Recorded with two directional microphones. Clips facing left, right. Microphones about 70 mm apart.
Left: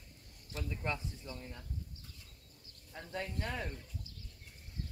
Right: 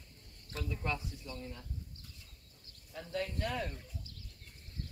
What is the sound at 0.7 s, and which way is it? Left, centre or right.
Speech, left.